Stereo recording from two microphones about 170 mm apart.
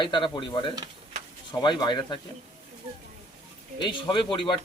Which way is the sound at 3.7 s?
30° left (ahead or behind).